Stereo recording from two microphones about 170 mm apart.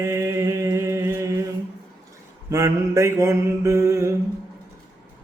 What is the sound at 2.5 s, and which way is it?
Mantra, 15° right (ahead or behind).